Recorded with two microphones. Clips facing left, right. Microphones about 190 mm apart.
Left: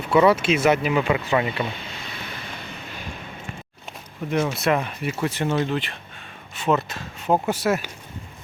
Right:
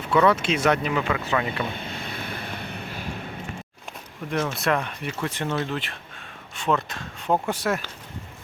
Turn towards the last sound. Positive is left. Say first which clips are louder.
# left 3 dB
turn(degrees=5)  # may be behind; listen again after turning